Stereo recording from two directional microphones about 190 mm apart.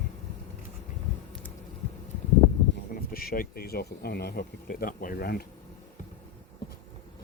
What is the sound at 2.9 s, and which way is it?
Speech, 50° left (ahead or behind).